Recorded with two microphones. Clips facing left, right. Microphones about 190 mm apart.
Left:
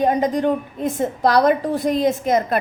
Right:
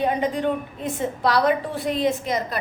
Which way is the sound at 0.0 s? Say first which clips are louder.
Left 4 dB; 40° left (ahead or behind).